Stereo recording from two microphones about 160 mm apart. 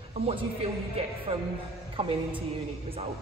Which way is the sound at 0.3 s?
35° right (ahead or behind).